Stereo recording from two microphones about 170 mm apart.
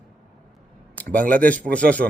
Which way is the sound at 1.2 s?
55° right (ahead or behind).